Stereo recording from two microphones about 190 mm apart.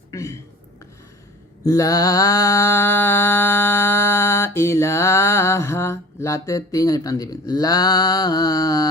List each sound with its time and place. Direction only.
0.1 s speech: 15° left (ahead or behind)
1.6 s mantra: 20° left (ahead or behind)